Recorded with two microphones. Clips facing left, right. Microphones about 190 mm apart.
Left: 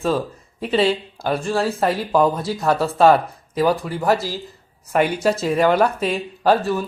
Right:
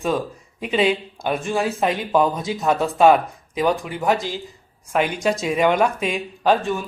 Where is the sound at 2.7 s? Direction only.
15° right (ahead or behind).